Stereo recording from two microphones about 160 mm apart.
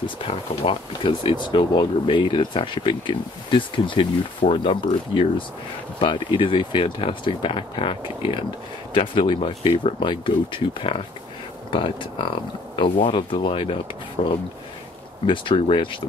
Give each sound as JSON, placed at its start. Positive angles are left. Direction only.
{"t": 0.0, "sound": "speech", "side_deg": 35}